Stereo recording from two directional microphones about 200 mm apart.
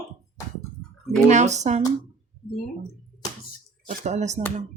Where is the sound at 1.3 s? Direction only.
35° right (ahead or behind).